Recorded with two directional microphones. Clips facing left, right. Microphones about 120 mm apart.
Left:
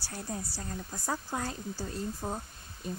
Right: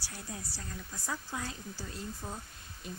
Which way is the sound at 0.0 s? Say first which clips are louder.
Left 6 dB; 40° left (ahead or behind).